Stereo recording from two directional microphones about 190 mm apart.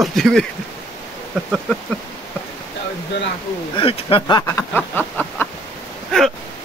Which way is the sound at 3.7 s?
30° left (ahead or behind).